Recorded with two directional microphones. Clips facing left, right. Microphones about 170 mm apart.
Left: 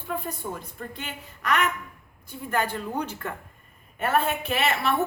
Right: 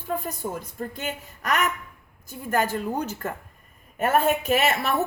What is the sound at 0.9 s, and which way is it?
A woman's voice, 45° right (ahead or behind).